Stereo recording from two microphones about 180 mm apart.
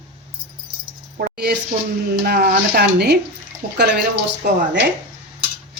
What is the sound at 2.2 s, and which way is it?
Speech, 60° right (ahead or behind).